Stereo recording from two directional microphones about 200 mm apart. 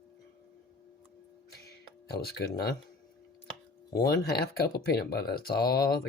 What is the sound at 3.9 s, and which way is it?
Speech, 50° left (ahead or behind).